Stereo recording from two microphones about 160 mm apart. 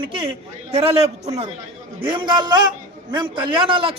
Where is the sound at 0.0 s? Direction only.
35° right (ahead or behind).